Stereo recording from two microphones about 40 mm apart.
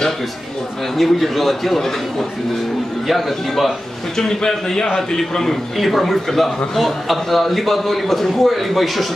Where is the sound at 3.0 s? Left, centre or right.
Centre.